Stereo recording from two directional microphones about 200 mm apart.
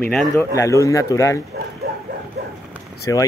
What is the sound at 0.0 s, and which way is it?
Speech, 5° left (ahead or behind).